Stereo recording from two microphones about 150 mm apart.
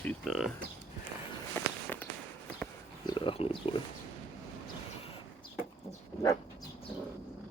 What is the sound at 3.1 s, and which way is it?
Speech, 35° left (ahead or behind).